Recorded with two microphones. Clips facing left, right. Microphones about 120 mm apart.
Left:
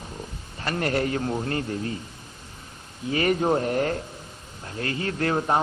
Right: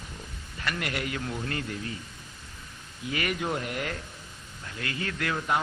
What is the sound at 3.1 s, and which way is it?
A man's voice, 35° left (ahead or behind).